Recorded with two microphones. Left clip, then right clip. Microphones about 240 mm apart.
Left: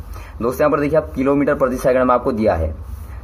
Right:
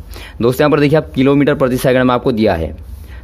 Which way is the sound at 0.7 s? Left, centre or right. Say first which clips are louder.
Right 4 dB; right.